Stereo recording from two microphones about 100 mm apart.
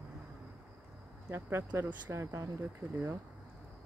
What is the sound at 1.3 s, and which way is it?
Speech, 25° right (ahead or behind).